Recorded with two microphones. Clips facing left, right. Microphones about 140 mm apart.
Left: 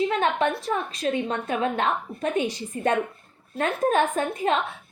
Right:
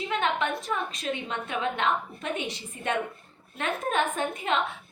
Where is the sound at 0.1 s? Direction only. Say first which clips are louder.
Left 4 dB; 35° left (ahead or behind).